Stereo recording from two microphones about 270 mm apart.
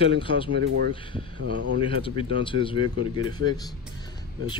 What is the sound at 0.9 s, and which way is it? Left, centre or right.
Speech, centre.